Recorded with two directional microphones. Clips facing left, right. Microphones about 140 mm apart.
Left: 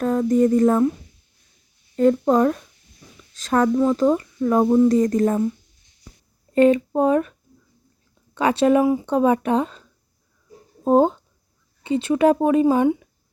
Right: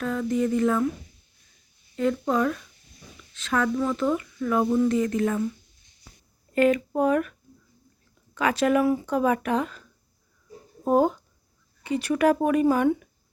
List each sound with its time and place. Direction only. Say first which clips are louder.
0.0 s speech: left 7 dB; 40° left (ahead or behind)
2.0 s speech: left 7 dB; 40° left (ahead or behind)
6.5 s speech: left 5 dB; 30° left (ahead or behind)
8.4 s speech: left 5 dB; 30° left (ahead or behind)
10.8 s speech: left 5 dB; 25° left (ahead or behind)